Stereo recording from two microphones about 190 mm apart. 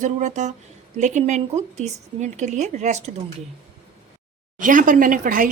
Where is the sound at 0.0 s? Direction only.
40° right (ahead or behind).